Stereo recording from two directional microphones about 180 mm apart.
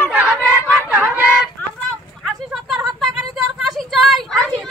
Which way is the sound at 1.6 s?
10° left (ahead or behind).